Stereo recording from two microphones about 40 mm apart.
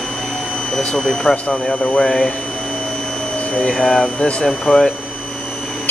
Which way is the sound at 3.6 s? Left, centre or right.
Centre.